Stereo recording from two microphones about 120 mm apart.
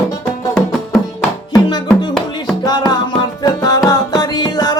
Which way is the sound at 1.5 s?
35° left (ahead or behind).